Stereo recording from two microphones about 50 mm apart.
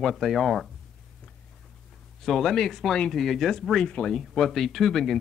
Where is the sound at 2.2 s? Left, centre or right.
Centre.